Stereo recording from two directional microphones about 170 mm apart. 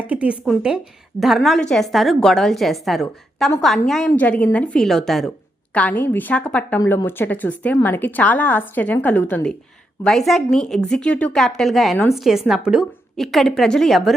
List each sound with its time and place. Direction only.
0.1 s a woman's voice: 10° right (ahead or behind)